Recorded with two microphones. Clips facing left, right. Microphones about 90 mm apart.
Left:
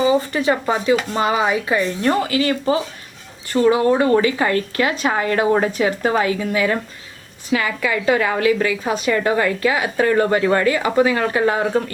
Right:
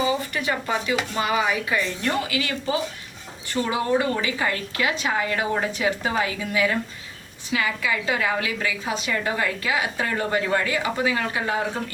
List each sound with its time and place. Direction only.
1.1 s a woman's voice: 35° left (ahead or behind); by 11.6 s 55° left (ahead or behind)